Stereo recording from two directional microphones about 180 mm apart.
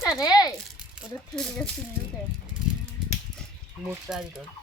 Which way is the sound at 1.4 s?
5° left (ahead or behind).